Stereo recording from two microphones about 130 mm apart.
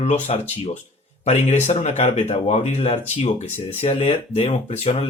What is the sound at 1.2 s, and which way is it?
Speech, 50° left (ahead or behind).